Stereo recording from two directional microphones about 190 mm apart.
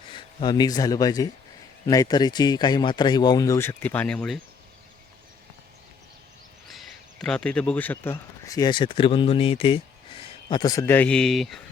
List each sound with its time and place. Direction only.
0.1 s speech: 25° left (ahead or behind); by 4.4 s 5° left (ahead or behind)
6.7 s speech: centre (ahead or behind)